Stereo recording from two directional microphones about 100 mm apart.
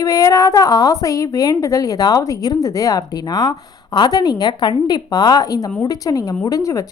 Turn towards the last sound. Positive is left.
turn(degrees=30)  # may be behind; listen again after turning